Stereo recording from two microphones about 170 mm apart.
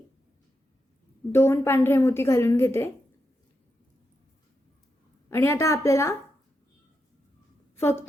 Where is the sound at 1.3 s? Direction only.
15° left (ahead or behind).